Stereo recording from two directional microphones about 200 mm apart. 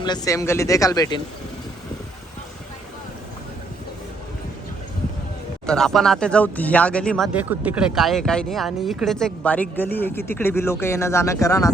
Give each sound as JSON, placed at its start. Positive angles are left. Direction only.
{"t": 0.0, "sound": "speech", "side_deg": 20}
{"t": 5.6, "sound": "speech", "side_deg": 0}
{"t": 7.3, "sound": "speech", "side_deg": -10}